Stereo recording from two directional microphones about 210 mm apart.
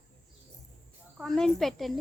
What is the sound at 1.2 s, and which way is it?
Speech, centre (ahead or behind).